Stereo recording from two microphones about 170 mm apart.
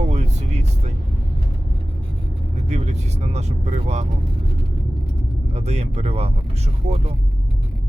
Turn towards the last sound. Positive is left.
turn(degrees=-40)  # may be behind; listen again after turning